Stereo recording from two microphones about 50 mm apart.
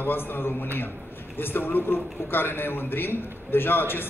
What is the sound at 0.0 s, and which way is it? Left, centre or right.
A man's voice, left.